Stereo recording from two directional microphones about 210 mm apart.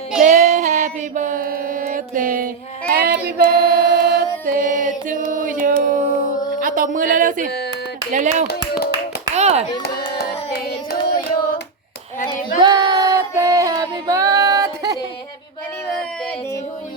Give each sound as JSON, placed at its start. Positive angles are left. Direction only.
{"t": 0.2, "sound": "child singing", "side_deg": -40}
{"t": 2.9, "sound": "female singing", "side_deg": -45}
{"t": 4.4, "sound": "music", "side_deg": -40}
{"t": 5.4, "sound": "a sound", "side_deg": -40}
{"t": 6.6, "sound": "speech", "side_deg": -40}
{"t": 9.3, "sound": "clapping", "side_deg": -30}
{"t": 9.8, "sound": "hands", "side_deg": 50}
{"t": 12.6, "sound": "female singing", "side_deg": -20}